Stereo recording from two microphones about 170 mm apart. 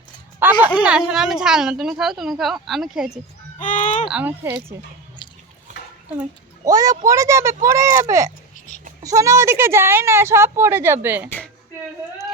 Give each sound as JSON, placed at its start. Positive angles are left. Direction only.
{"t": 0.3, "sound": "a sound", "side_deg": -10}
{"t": 0.8, "sound": "a woman's voice", "side_deg": -5}
{"t": 3.6, "sound": "speech", "side_deg": 50}
{"t": 4.1, "sound": "a woman's voice", "side_deg": -10}
{"t": 6.7, "sound": "a woman's voice", "side_deg": -20}